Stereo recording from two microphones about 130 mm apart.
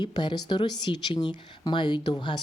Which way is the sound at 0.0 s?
35° left (ahead or behind).